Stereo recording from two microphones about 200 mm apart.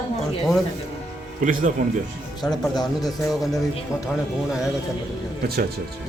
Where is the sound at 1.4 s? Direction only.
40° right (ahead or behind).